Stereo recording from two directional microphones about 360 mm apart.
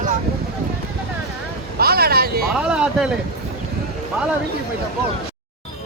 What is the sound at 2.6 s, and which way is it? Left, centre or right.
Speech, centre.